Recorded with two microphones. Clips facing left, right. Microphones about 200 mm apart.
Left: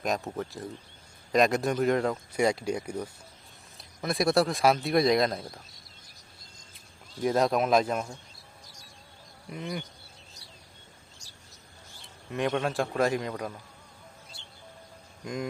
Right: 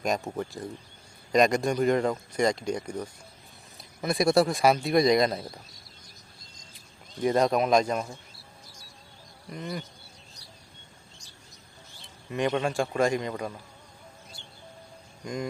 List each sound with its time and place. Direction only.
0.3 s speech: 15° right (ahead or behind)
1.3 s speech: centre (ahead or behind)
7.2 s speech: centre (ahead or behind)
9.5 s speech: 5° left (ahead or behind)
12.0 s speech: centre (ahead or behind)
15.2 s speech: centre (ahead or behind)